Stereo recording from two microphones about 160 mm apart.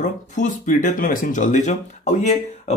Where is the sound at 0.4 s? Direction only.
55° left (ahead or behind).